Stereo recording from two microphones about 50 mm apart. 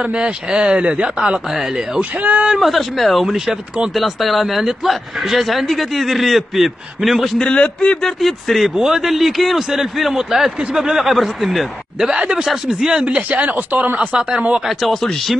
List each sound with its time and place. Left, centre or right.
0.0 s speech: centre
2.0 s speech: right
2.6 s speech: centre
7.3 s a man's voice: centre
8.0 s speech: centre
12.1 s speech: centre
13.3 s speech: right
14.7 s speech: centre